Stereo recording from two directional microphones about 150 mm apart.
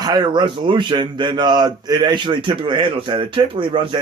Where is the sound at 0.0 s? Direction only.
25° right (ahead or behind).